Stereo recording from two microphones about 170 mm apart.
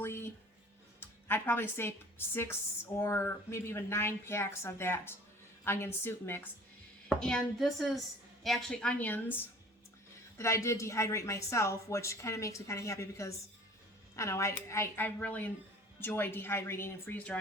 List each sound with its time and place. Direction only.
0.0 s a sound: 15° left (ahead or behind)
0.9 s a woman's voice: 10° left (ahead or behind)
10.3 s speech: 15° left (ahead or behind)